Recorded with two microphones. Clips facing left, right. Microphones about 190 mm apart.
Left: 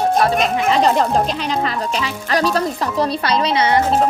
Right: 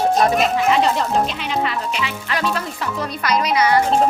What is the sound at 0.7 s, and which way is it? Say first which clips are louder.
Speech: left 2 dB; 40° left (ahead or behind).